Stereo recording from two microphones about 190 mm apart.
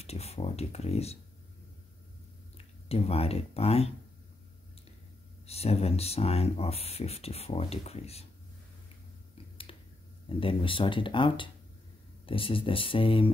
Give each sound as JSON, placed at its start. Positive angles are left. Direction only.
{"t": 0.0, "sound": "speech", "side_deg": 35}
{"t": 2.5, "sound": "speech", "side_deg": 30}
{"t": 5.5, "sound": "speech", "side_deg": 30}
{"t": 9.7, "sound": "finger snapping", "side_deg": 30}
{"t": 10.2, "sound": "speech", "side_deg": 25}